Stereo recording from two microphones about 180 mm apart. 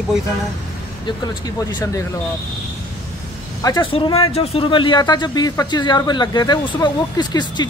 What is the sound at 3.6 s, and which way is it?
Speech, 25° left (ahead or behind).